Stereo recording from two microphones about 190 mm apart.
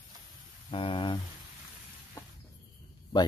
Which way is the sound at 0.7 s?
25° left (ahead or behind).